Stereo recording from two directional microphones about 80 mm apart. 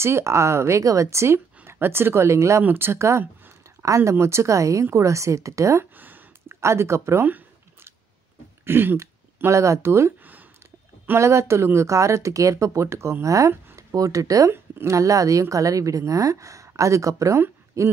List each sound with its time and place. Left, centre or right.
0.0 s speech: right
5.9 s a sound: right
6.5 s speech: right
7.2 s a sound: right
8.6 s speech: right
11.1 s a woman's voice: right